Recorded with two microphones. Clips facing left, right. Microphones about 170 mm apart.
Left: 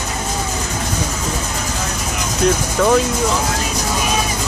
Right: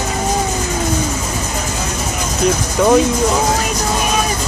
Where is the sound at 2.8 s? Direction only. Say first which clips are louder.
Right 3 dB; 15° right (ahead or behind).